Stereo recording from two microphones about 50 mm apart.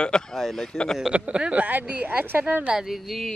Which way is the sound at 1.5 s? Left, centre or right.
Right.